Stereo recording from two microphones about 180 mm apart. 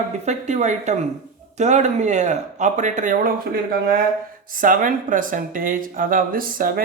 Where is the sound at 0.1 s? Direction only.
40° right (ahead or behind).